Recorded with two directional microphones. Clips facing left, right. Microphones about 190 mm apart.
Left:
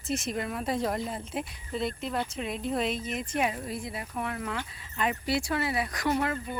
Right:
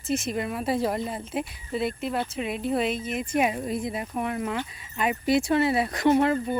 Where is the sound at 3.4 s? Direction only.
20° right (ahead or behind).